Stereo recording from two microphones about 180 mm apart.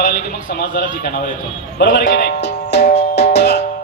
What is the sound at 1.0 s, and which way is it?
Speech, 70° left (ahead or behind).